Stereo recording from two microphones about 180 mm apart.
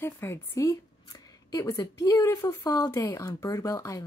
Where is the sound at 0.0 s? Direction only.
15° left (ahead or behind).